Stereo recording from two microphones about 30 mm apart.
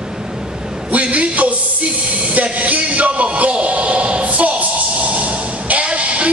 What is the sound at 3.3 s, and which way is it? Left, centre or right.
Speech, right.